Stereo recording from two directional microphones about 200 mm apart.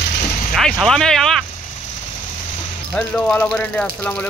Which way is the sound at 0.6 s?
5° left (ahead or behind).